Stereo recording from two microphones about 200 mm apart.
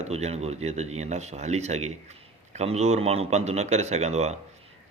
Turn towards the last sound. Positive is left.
turn(degrees=-35)  # may be behind; listen again after turning